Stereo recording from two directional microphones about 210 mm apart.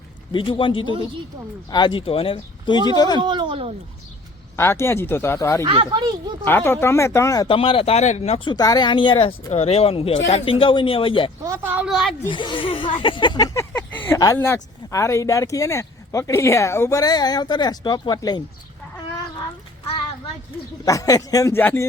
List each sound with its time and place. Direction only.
0.3 s speech: 25° left (ahead or behind)
3.2 s speech: 20° right (ahead or behind)
4.5 s speech: 10° left (ahead or behind)
5.6 s speech: 25° right (ahead or behind)
6.4 s speech: 10° left (ahead or behind); by 8.5 s 30° left (ahead or behind)
8.5 s speech: 20° left (ahead or behind)
11.4 s speech: 10° right (ahead or behind)
12.3 s speech: 25° left (ahead or behind)
20.8 s speech: 15° left (ahead or behind)